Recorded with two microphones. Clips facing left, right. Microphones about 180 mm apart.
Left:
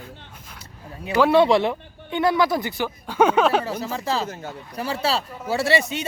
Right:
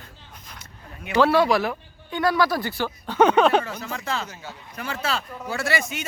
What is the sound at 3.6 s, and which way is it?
Speech, 30° left (ahead or behind).